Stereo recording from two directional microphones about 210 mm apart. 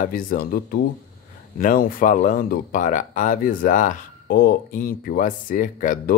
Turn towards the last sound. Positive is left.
turn(degrees=40)  # may be behind; listen again after turning